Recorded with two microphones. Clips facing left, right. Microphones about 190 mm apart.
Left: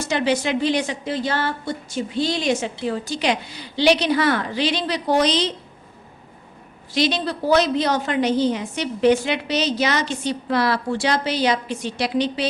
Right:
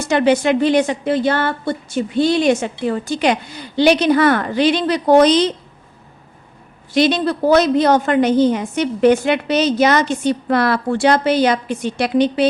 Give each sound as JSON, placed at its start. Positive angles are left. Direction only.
{"t": 0.1, "sound": "a woman's voice", "side_deg": -55}
{"t": 6.9, "sound": "a woman's voice", "side_deg": -55}